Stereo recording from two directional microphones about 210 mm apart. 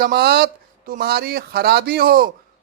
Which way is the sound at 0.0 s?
50° right (ahead or behind).